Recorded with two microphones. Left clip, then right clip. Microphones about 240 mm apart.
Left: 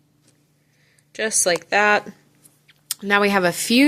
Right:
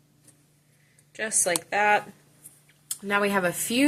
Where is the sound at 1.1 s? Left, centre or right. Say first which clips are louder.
Left 7 dB; left.